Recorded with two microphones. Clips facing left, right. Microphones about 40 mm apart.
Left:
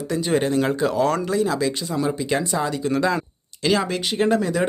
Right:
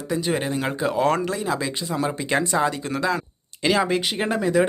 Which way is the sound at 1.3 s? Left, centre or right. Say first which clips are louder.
Left 4 dB; centre.